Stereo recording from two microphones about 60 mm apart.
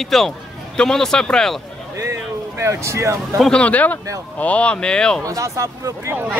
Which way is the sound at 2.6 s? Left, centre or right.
Right.